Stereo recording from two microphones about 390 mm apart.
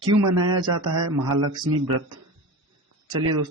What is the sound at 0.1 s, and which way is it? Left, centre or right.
Speech, right.